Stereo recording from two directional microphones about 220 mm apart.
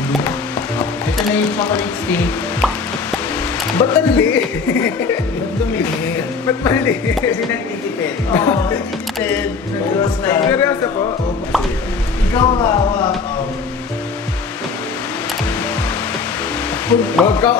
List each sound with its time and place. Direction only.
0.7 s music: 5° left (ahead or behind)
3.7 s speech: 10° left (ahead or behind)
5.7 s music: 10° left (ahead or behind)
8.0 s speech: 10° left (ahead or behind)
12.4 s speech: 20° left (ahead or behind)
16.9 s speech: 10° left (ahead or behind)